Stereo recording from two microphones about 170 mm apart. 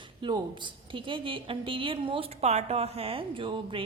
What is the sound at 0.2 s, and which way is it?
A woman's voice, 25° right (ahead or behind).